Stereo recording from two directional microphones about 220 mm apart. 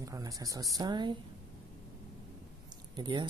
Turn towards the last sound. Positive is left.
turn(degrees=-20)  # may be behind; listen again after turning